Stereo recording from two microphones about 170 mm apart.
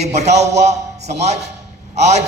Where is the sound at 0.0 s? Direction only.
40° right (ahead or behind).